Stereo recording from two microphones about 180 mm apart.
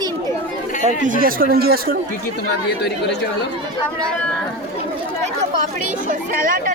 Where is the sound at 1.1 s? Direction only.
50° right (ahead or behind).